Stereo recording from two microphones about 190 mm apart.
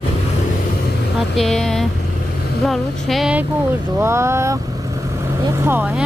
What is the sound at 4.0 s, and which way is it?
Speech, 15° right (ahead or behind).